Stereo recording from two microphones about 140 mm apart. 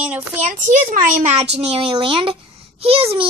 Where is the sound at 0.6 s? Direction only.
60° right (ahead or behind).